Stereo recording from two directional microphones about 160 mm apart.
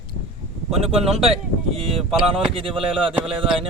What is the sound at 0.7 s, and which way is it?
Speech, 40° right (ahead or behind).